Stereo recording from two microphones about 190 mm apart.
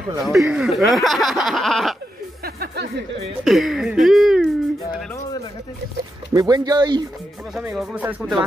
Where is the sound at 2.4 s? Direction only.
55° right (ahead or behind).